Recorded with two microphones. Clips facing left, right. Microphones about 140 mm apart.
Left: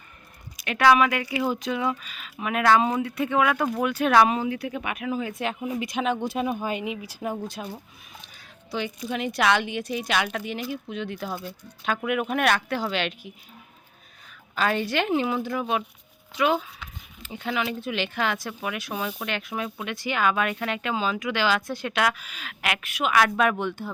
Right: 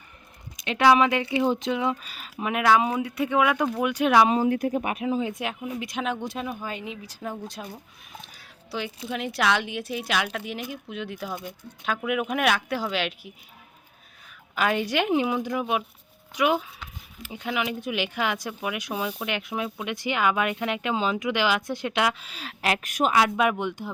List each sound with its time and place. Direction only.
0.5 s speech: 20° right (ahead or behind)
2.0 s speech: 35° right (ahead or behind)
2.4 s speech: 15° right (ahead or behind)
4.4 s speech: 45° right (ahead or behind); by 5.4 s 25° right (ahead or behind)
5.8 s a woman's voice: centre (ahead or behind)
6.4 s a woman's voice: 20° left (ahead or behind); by 7.7 s centre (ahead or behind)
9.0 s a woman's voice: centre (ahead or behind)
14.5 s speech: 15° right (ahead or behind); by 23.1 s 45° right (ahead or behind)
23.4 s speech: 15° right (ahead or behind)